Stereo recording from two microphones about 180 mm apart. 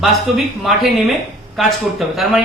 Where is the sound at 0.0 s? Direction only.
Centre (ahead or behind).